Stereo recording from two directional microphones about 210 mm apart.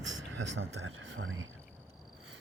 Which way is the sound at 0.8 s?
70° right (ahead or behind).